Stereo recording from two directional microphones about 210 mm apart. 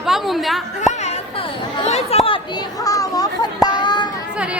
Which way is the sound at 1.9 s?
30° left (ahead or behind).